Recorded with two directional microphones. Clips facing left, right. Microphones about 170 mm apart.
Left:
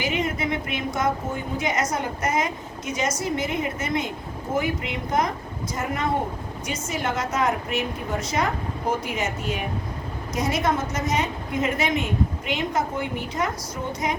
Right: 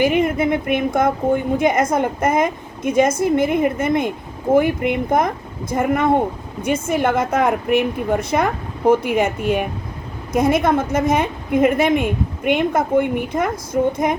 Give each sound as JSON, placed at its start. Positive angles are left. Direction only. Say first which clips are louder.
{"t": 0.0, "sound": "a woman's voice", "louder": "right 9 dB", "side_deg": -55}